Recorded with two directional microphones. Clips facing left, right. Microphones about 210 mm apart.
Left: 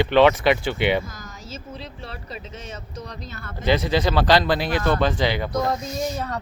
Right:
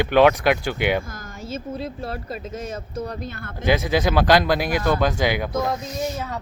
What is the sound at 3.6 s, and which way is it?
Speech, 10° right (ahead or behind).